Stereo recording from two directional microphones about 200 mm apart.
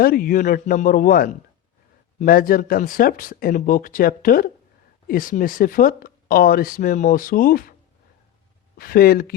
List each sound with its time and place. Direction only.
0.0 s speech: 45° left (ahead or behind)
8.7 s speech: 50° left (ahead or behind)